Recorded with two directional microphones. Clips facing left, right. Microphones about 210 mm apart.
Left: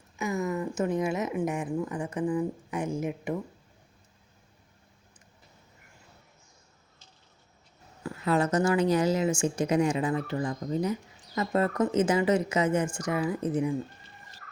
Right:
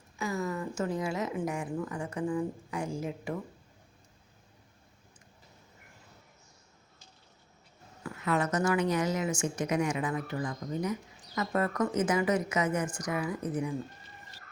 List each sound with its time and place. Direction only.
0.2 s a sound: 20° left (ahead or behind)
0.8 s speech: 20° left (ahead or behind)
8.0 s speech: 30° left (ahead or behind)